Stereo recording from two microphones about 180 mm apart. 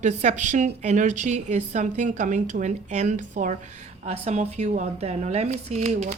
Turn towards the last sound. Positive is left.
turn(degrees=-40)  # may be behind; listen again after turning